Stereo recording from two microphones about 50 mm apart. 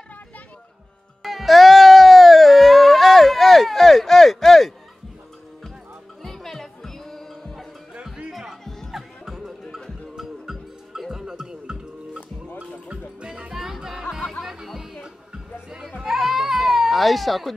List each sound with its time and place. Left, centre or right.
1.2 s music: centre
6.2 s music: centre
7.9 s music: centre
8.3 s music: centre; by 13.5 s right
13.5 s music: centre
16.0 s baby cry: centre